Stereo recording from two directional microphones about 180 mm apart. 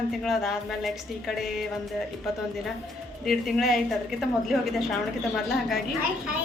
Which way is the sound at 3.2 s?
Centre (ahead or behind).